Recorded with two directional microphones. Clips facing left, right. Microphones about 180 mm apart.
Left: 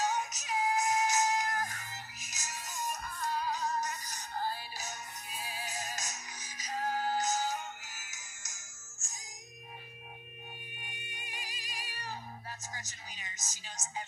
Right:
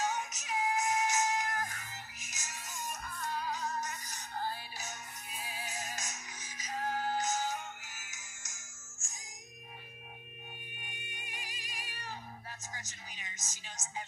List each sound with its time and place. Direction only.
0.0 s music: 35° left (ahead or behind)
10.8 s music: 35° left (ahead or behind)